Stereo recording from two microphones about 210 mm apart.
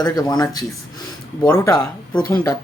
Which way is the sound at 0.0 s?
20° left (ahead or behind).